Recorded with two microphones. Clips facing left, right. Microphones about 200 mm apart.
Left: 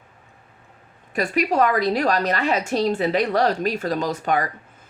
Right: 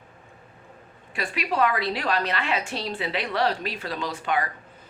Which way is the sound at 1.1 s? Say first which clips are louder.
Left 7 dB; 45° left (ahead or behind).